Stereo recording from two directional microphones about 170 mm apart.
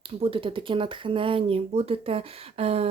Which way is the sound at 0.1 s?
35° right (ahead or behind).